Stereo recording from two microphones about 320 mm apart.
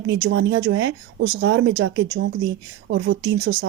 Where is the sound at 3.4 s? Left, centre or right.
Right.